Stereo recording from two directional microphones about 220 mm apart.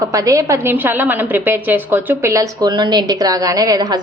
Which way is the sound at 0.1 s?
15° right (ahead or behind).